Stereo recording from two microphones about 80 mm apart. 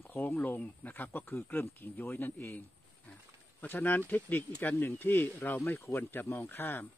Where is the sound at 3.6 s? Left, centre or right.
Left.